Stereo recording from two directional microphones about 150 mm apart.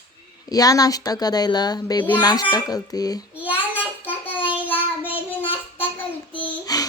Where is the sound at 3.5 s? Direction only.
15° left (ahead or behind).